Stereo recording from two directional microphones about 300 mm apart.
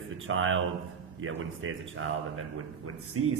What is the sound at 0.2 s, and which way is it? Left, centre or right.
Speech, right.